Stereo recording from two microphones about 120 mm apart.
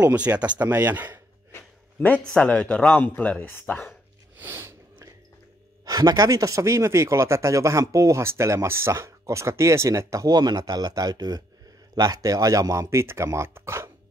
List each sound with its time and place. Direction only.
0.0 s speech: 15° right (ahead or behind)
1.5 s speech: 15° left (ahead or behind)
4.4 s snort: 20° right (ahead or behind)
5.9 s speech: 35° right (ahead or behind)